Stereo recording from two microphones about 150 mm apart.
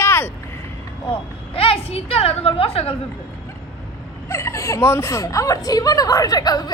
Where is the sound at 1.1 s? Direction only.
40° left (ahead or behind).